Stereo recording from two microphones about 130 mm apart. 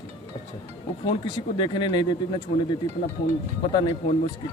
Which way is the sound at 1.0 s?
40° left (ahead or behind).